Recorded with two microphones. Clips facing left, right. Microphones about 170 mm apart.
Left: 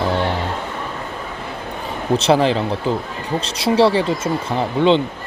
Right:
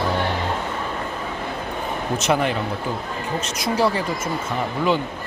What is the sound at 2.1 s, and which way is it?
Speech, 30° left (ahead or behind).